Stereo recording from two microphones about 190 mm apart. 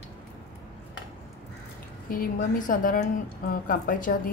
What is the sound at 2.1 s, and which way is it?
Speech, 45° left (ahead or behind).